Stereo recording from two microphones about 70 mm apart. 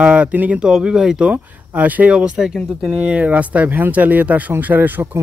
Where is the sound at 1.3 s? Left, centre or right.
Right.